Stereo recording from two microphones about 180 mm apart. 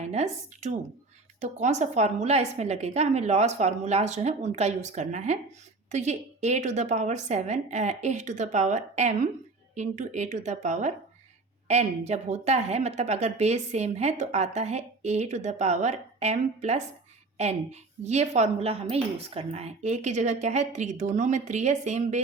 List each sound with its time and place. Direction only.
0.0 s a woman's voice: 40° right (ahead or behind)